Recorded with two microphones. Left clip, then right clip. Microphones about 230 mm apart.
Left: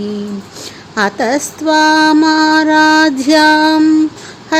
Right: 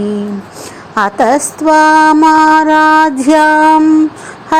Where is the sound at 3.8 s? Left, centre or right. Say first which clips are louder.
Right 2 dB; centre.